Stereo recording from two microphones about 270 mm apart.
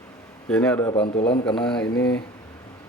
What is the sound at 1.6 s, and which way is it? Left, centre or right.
Speech, centre.